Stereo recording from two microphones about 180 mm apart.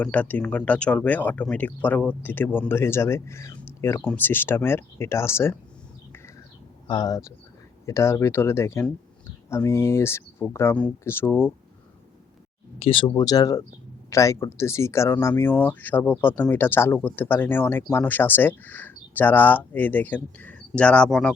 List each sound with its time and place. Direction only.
0.0 s speech: 10° left (ahead or behind)
6.8 s speech: 25° left (ahead or behind)
12.8 s speech: 30° left (ahead or behind); by 21.3 s 5° left (ahead or behind)